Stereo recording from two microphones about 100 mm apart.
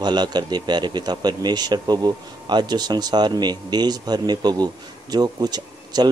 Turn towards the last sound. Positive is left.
turn(degrees=-45)  # may be behind; listen again after turning